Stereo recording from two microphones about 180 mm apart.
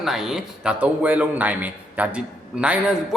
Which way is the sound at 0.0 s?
Centre (ahead or behind).